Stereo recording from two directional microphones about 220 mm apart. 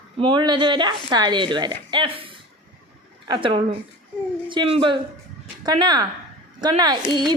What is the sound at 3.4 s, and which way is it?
A woman's voice, 25° right (ahead or behind).